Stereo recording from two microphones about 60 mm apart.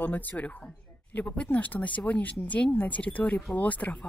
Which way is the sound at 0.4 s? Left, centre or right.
Left.